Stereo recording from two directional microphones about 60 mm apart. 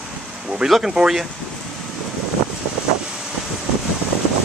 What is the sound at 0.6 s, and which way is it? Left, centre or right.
Speech, centre.